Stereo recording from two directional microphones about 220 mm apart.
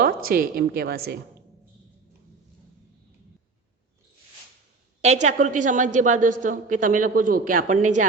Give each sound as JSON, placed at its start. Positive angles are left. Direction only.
{"t": 0.3, "sound": "a woman's voice", "side_deg": -40}
{"t": 5.0, "sound": "a woman's voice", "side_deg": -30}